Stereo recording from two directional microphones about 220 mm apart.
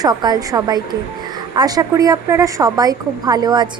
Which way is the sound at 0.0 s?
15° right (ahead or behind).